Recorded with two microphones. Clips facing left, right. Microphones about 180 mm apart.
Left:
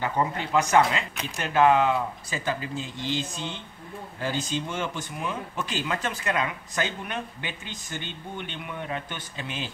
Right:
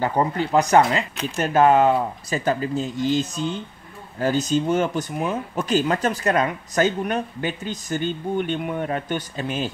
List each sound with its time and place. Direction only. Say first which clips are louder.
0.0 s speech: right 5 dB; 35° right (ahead or behind)